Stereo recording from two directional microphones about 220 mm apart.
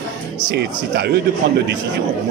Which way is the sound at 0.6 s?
45° right (ahead or behind).